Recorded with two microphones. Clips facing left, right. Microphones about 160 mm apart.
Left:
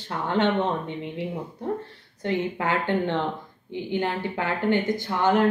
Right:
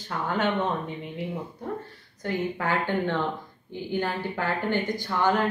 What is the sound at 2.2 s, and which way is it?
Speech, 25° left (ahead or behind).